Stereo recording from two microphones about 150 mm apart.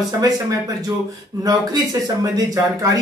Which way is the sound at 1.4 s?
25° right (ahead or behind).